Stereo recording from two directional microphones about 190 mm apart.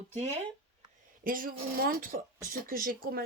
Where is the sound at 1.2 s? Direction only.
45° right (ahead or behind).